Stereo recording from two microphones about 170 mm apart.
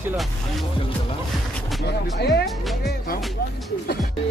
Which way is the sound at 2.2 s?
75° left (ahead or behind).